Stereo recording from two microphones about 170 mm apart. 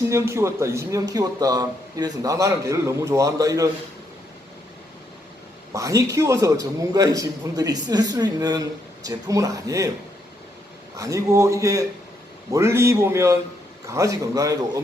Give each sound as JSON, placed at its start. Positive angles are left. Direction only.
{"t": 0.1, "sound": "a man's voice", "side_deg": -15}
{"t": 5.7, "sound": "a man's voice", "side_deg": -20}
{"t": 10.9, "sound": "a man's voice", "side_deg": -20}